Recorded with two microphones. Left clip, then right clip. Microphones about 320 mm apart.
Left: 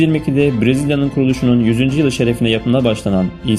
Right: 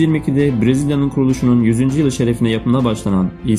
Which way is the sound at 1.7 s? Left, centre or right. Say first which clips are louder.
Left 1 dB; left.